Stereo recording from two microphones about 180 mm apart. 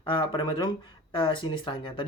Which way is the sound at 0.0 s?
25° left (ahead or behind).